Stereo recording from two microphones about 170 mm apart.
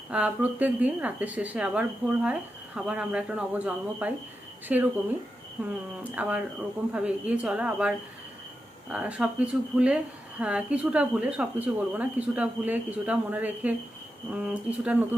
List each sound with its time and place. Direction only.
0.1 s speech: 10° right (ahead or behind)